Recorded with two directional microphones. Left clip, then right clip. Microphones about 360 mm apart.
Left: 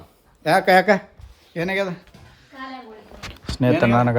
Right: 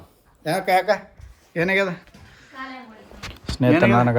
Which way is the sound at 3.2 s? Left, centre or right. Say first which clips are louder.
Even; centre.